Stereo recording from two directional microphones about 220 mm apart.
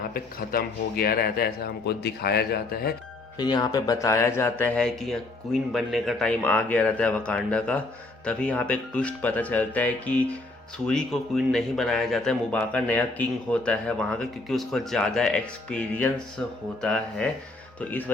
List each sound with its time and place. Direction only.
0.1 s speech: 40° left (ahead or behind)
3.3 s speech: 20° left (ahead or behind)